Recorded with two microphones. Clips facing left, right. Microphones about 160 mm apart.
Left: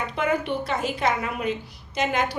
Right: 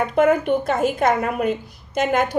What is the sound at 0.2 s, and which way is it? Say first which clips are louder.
A woman's voice: right 8 dB; 50° right (ahead or behind).